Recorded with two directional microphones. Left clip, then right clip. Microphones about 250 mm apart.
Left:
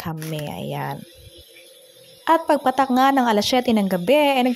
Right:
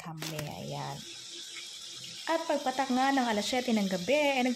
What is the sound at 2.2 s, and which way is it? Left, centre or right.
Speech, left.